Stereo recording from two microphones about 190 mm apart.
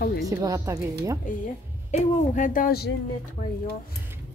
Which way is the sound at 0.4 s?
15° right (ahead or behind).